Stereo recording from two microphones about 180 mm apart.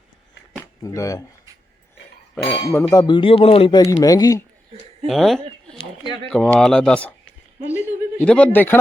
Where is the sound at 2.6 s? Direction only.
20° left (ahead or behind).